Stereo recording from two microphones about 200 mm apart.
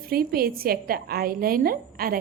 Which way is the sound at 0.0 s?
50° right (ahead or behind).